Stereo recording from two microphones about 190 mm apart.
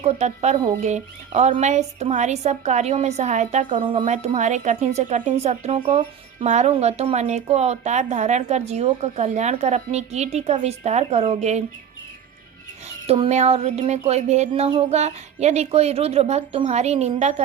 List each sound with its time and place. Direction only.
0.0 s a woman's voice: 35° right (ahead or behind)
13.1 s a woman's voice: 35° right (ahead or behind)